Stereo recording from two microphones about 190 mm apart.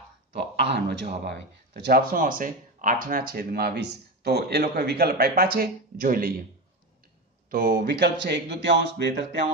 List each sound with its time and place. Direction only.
0.3 s a sound: 65° right (ahead or behind)
1.2 s speech: 60° right (ahead or behind)
7.5 s speech: 45° right (ahead or behind)